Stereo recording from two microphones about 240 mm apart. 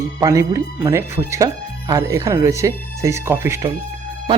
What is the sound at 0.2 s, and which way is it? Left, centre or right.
Speech, centre.